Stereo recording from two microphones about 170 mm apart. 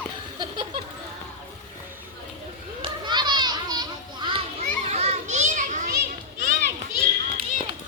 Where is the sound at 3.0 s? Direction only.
25° right (ahead or behind).